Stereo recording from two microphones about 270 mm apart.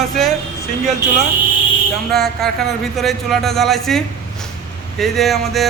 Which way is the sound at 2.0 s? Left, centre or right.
Centre.